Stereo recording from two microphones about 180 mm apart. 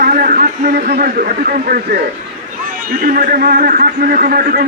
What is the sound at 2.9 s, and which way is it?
A man's voice, 50° right (ahead or behind).